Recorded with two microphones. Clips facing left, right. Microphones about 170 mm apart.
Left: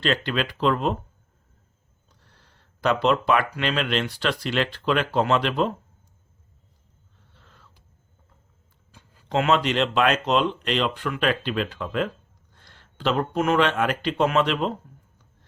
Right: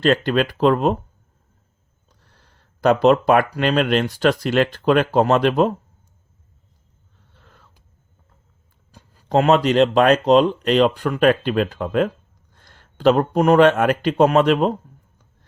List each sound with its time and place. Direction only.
0.0 s speech: 45° right (ahead or behind)
2.0 s speech: 45° right (ahead or behind)
8.9 s speech: 40° right (ahead or behind)